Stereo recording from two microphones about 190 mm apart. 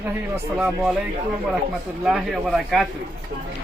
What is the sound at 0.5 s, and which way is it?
Speech, 5° right (ahead or behind).